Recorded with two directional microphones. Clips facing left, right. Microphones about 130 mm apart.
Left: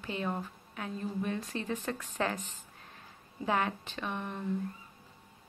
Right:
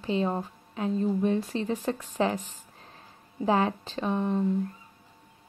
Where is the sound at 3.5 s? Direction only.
30° right (ahead or behind).